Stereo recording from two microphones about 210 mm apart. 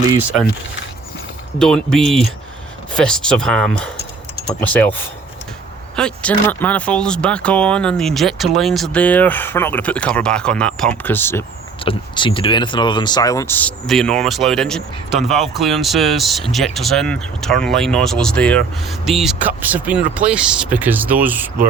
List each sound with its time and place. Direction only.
1.5 s speech: centre (ahead or behind)
6.0 s speech: 5° left (ahead or behind)
11.8 s speech: 25° left (ahead or behind); by 21.5 s 10° right (ahead or behind)